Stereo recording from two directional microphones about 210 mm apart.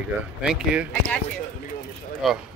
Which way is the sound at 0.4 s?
5° right (ahead or behind).